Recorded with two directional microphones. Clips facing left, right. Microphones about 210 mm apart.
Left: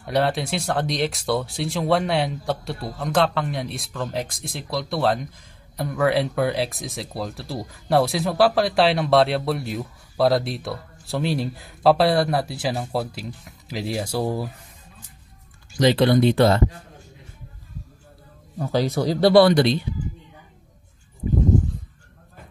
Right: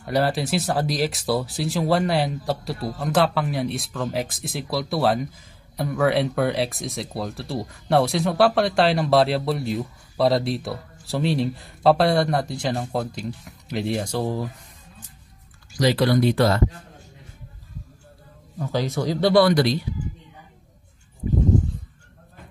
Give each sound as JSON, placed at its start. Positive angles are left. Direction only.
{"t": 0.0, "sound": "speech", "side_deg": 0}
{"t": 15.7, "sound": "speech", "side_deg": 25}
{"t": 18.7, "sound": "speech", "side_deg": 35}